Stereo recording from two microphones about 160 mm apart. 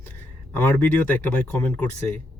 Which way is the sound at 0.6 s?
10° left (ahead or behind).